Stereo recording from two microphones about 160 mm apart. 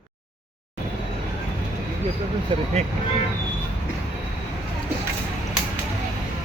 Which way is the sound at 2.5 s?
30° right (ahead or behind).